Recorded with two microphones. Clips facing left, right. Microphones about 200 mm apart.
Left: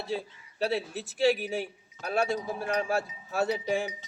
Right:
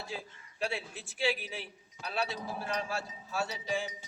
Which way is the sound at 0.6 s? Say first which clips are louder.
Left 7 dB; 40° left (ahead or behind).